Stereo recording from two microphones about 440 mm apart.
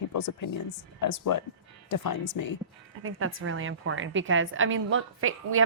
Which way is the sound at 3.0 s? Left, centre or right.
Right.